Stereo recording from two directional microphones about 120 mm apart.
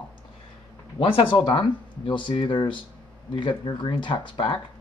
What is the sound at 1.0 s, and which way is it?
Speech, 45° left (ahead or behind).